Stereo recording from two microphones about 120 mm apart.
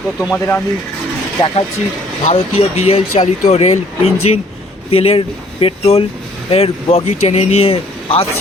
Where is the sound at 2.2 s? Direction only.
60° left (ahead or behind).